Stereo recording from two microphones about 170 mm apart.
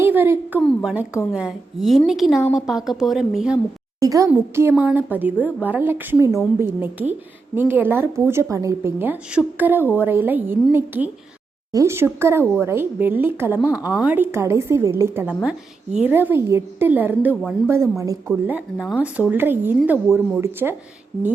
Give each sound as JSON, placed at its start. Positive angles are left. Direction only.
{"t": 0.0, "sound": "a woman's voice", "side_deg": -10}
{"t": 4.0, "sound": "a child's voice", "side_deg": -20}
{"t": 18.3, "sound": "a woman's voice", "side_deg": -5}